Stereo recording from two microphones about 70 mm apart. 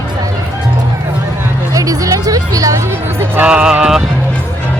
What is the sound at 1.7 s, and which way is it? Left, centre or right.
Music, right.